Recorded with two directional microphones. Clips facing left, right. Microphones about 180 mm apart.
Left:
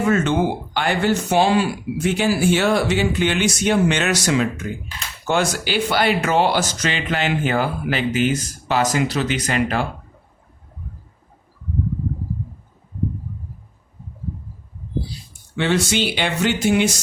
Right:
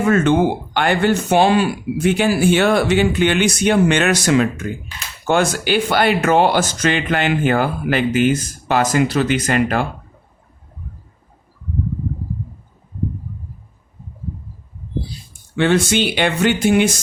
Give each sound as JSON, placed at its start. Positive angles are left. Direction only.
{"t": 0.1, "sound": "speech", "side_deg": -55}
{"t": 15.5, "sound": "speech", "side_deg": -55}